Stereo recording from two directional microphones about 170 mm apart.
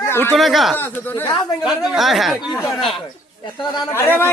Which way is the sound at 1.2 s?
25° left (ahead or behind).